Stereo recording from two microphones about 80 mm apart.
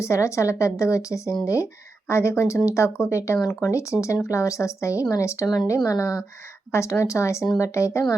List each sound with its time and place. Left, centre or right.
0.0 s a woman's voice: left